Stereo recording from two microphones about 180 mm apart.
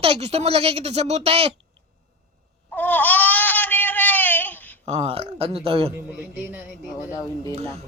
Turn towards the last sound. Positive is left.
turn(degrees=20)  # may be behind; listen again after turning